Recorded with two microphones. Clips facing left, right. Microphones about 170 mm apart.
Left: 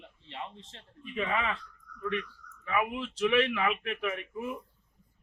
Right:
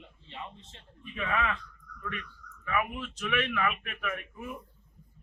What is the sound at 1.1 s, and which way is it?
Speech, 25° left (ahead or behind).